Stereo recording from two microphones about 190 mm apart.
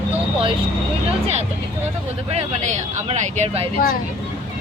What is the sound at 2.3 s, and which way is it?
Speech, 35° right (ahead or behind).